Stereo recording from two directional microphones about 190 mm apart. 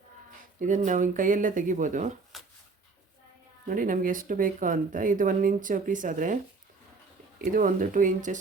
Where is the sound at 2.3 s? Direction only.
Centre (ahead or behind).